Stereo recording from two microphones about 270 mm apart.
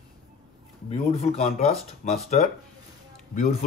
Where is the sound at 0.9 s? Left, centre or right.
Left.